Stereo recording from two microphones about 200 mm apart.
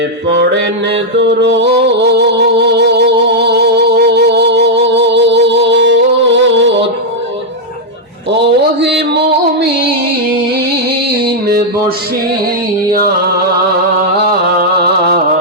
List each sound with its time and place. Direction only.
0.3 s mantra: 55° right (ahead or behind)
1.4 s music: 60° right (ahead or behind)
8.3 s a sound: 60° right (ahead or behind)
11.1 s music: 50° right (ahead or behind)